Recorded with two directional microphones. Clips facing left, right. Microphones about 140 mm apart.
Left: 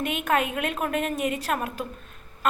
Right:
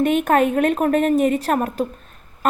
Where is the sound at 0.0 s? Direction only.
45° right (ahead or behind).